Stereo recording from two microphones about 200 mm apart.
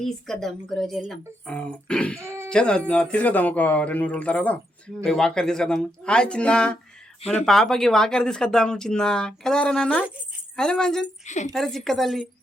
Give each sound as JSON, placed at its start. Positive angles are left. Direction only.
{"t": 0.0, "sound": "speech", "side_deg": 0}
{"t": 2.2, "sound": "a sound", "side_deg": -15}
{"t": 2.5, "sound": "a man's voice", "side_deg": 5}
{"t": 11.3, "sound": "a woman's voice", "side_deg": 35}
{"t": 11.5, "sound": "speech", "side_deg": 0}